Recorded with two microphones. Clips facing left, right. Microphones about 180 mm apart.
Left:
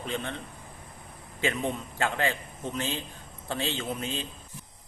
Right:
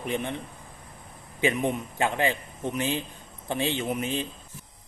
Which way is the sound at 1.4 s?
15° right (ahead or behind).